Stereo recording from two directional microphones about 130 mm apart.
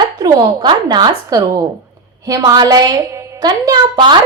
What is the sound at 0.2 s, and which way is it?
A woman's voice, 30° right (ahead or behind).